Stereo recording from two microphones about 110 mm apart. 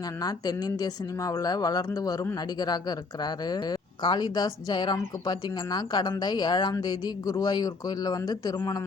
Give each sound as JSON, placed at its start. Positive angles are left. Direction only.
{"t": 0.2, "sound": "speech", "side_deg": 35}